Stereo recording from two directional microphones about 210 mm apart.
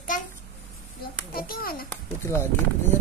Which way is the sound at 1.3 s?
45° left (ahead or behind).